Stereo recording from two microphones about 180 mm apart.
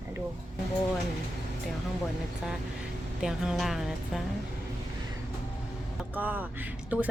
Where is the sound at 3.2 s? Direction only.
Centre (ahead or behind).